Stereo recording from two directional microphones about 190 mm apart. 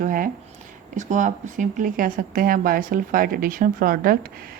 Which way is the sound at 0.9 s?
40° right (ahead or behind).